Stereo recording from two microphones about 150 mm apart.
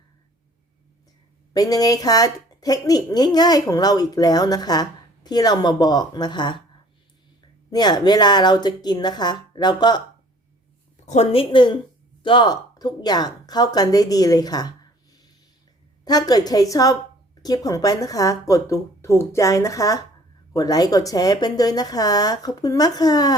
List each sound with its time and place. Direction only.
1.5 s a woman's voice: 25° left (ahead or behind)
7.7 s a woman's voice: 30° left (ahead or behind)
11.0 s a woman's voice: 50° left (ahead or behind); by 14.7 s 25° left (ahead or behind)
16.0 s a woman's voice: 25° left (ahead or behind)